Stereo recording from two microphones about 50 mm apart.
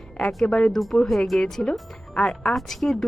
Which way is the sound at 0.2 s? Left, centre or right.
Centre.